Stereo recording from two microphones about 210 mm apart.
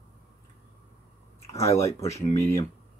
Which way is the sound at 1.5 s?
15° left (ahead or behind).